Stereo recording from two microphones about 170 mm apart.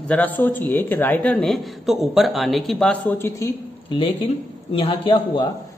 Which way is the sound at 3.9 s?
30° left (ahead or behind).